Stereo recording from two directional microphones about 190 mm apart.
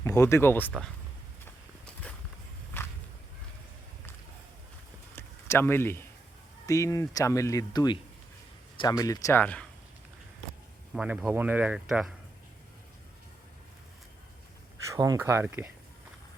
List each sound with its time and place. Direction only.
0.0 s speech: 15° left (ahead or behind)
5.1 s a sound: 10° left (ahead or behind)
6.7 s speech: 15° left (ahead or behind)
10.9 s speech: 5° right (ahead or behind)
14.9 s speech: 20° right (ahead or behind)